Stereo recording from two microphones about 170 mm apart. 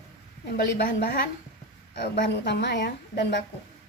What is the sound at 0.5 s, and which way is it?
A woman's voice, 75° left (ahead or behind).